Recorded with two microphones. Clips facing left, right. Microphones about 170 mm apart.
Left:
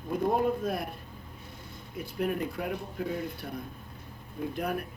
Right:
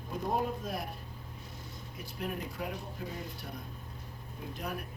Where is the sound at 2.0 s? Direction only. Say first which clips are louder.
Left 8 dB; 55° left (ahead or behind).